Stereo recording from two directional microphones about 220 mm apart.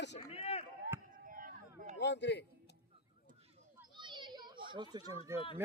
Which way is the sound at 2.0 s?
50° left (ahead or behind).